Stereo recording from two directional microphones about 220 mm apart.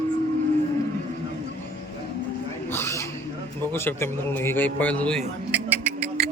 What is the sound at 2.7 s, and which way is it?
Owl, 10° left (ahead or behind).